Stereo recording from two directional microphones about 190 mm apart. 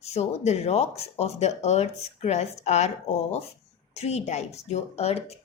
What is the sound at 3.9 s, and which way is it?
Speech, 35° left (ahead or behind).